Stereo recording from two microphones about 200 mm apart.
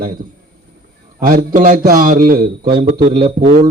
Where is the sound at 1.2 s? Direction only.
45° right (ahead or behind).